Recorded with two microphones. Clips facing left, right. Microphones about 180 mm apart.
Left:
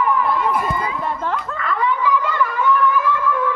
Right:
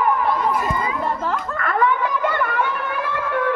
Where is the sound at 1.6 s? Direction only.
55° right (ahead or behind).